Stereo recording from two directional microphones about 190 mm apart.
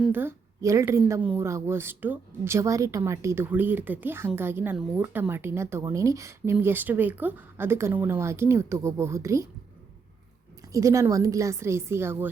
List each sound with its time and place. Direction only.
0.0 s a woman's voice: 10° right (ahead or behind)
10.7 s a woman's voice: 15° right (ahead or behind)